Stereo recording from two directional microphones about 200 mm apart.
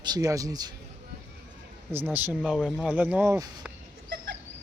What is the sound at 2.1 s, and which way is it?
Speech, 10° right (ahead or behind).